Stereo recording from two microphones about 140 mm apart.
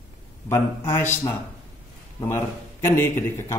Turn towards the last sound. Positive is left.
turn(degrees=15)  # may be behind; listen again after turning